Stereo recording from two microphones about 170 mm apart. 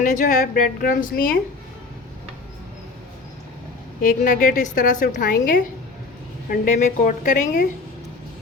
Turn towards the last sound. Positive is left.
turn(degrees=50)  # may be behind; listen again after turning